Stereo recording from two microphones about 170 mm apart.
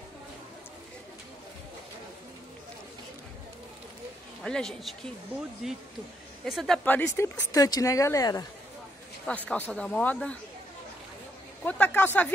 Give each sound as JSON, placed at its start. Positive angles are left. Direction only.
{"t": 4.4, "sound": "a woman's voice", "side_deg": 5}
{"t": 6.8, "sound": "speech", "side_deg": 10}
{"t": 9.2, "sound": "speech", "side_deg": 5}
{"t": 11.6, "sound": "speech", "side_deg": 10}